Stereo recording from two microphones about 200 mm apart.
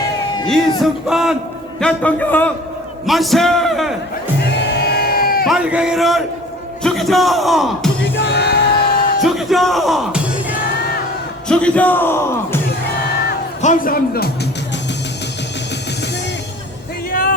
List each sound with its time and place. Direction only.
0.4 s speech: centre (ahead or behind)
4.4 s music: 55° left (ahead or behind)
5.5 s speech: 5° right (ahead or behind)
8.1 s music: 60° left (ahead or behind)
9.2 s speech: centre (ahead or behind)
11.4 s speech: 5° left (ahead or behind)
13.6 s a man's voice: 40° left (ahead or behind)
17.1 s music: 45° left (ahead or behind)